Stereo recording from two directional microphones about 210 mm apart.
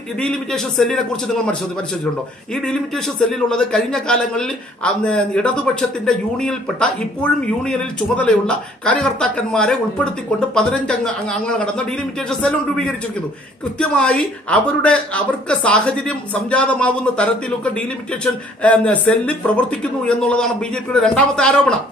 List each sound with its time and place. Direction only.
0.2 s a man's voice: 5° left (ahead or behind)